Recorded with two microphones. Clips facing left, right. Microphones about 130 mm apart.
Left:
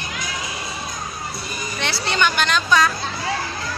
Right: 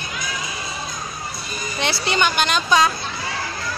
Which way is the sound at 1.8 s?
15° right (ahead or behind).